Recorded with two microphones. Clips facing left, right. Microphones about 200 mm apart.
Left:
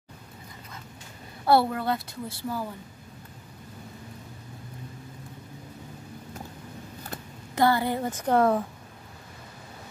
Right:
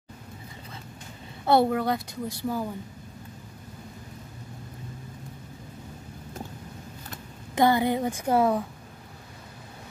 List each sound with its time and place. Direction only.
1.4 s a woman's voice: 20° right (ahead or behind)
7.5 s a woman's voice: 15° right (ahead or behind)